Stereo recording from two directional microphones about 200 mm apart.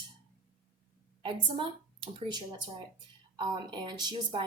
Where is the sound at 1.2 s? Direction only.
25° right (ahead or behind).